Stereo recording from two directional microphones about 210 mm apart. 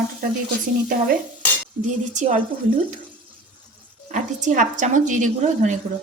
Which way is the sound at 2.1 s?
35° right (ahead or behind).